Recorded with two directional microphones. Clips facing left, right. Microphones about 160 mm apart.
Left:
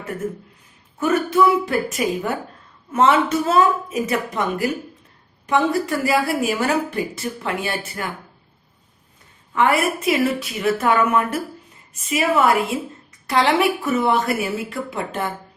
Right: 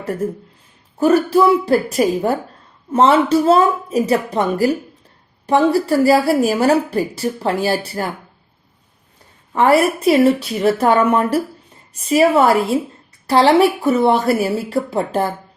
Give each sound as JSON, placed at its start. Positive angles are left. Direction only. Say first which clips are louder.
{"t": 0.9, "sound": "a woman's voice", "louder": "right 5 dB", "side_deg": -35}
{"t": 9.5, "sound": "a woman's voice", "louder": "right 5 dB", "side_deg": -35}